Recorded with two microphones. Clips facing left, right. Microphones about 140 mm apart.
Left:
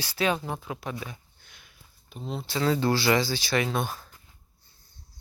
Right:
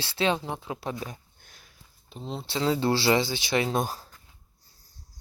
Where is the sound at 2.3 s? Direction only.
30° right (ahead or behind).